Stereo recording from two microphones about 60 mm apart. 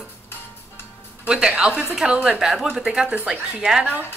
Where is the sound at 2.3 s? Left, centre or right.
Centre.